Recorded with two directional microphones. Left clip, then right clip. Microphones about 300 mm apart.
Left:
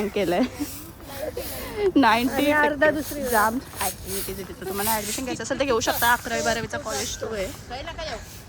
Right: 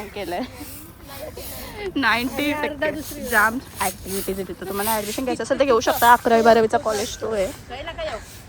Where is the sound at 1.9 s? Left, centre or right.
Centre.